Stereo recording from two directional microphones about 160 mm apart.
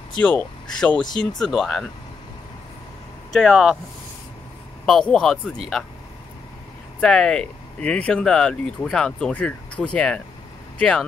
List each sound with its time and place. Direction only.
0.4 s speech: 10° left (ahead or behind)
3.3 s speech: 5° right (ahead or behind)
4.8 s speech: 5° left (ahead or behind)
7.0 s speech: 5° left (ahead or behind)